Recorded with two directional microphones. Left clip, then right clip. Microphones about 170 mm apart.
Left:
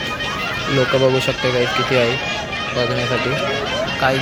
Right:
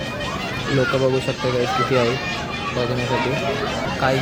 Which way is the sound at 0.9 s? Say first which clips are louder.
Left 4 dB; 35° left (ahead or behind).